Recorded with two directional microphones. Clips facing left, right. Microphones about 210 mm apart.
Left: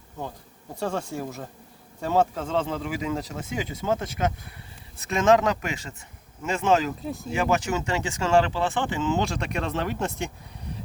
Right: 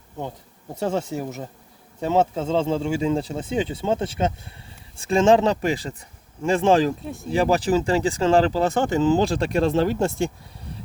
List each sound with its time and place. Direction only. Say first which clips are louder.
0.7 s speech: right 4 dB; 20° right (ahead or behind)
7.0 s speech: left 1 dB; centre (ahead or behind)
7.3 s speech: right 5 dB; 35° right (ahead or behind)